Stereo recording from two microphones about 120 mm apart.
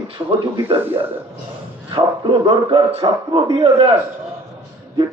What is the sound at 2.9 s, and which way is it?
Speech, 55° right (ahead or behind).